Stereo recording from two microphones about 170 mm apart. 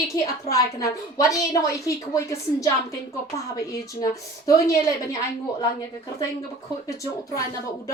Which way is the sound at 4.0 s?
20° left (ahead or behind).